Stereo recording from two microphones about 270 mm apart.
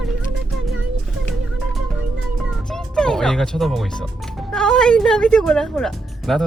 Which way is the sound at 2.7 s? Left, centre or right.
Centre.